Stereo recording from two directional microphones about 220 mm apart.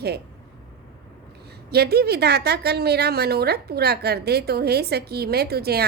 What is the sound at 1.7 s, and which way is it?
A woman's voice, 45° right (ahead or behind).